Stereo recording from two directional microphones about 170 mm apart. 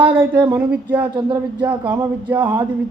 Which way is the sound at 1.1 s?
25° right (ahead or behind).